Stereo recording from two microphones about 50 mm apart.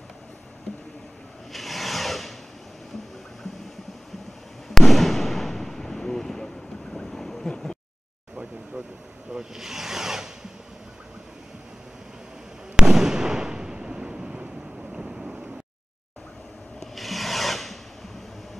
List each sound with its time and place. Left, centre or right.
1.5 s rub: centre
4.6 s fireworks: centre
7.4 s a sound: centre
9.3 s a sound: centre
12.7 s fireworks: centre
14.8 s wind noise: centre
16.8 s rub: centre